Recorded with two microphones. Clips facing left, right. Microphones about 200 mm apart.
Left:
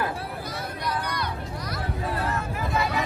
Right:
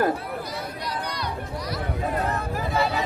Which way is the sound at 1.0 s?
50° left (ahead or behind).